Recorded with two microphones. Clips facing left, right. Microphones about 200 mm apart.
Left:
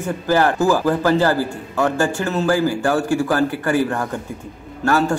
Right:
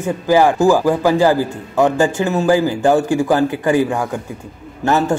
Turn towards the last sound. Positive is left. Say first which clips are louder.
# right 2 dB
turn(degrees=-20)  # may be behind; listen again after turning